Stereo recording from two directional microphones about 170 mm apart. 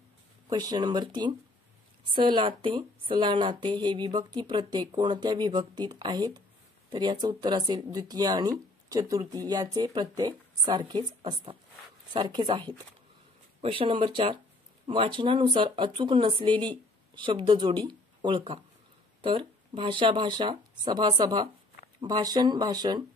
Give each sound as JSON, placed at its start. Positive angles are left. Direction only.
{"t": 0.5, "sound": "speech", "side_deg": -20}